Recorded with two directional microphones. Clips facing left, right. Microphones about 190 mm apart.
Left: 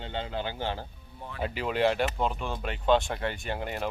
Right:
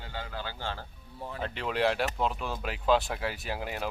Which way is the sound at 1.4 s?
5° left (ahead or behind).